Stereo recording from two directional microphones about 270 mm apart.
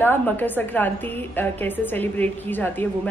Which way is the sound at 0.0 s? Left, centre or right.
Centre.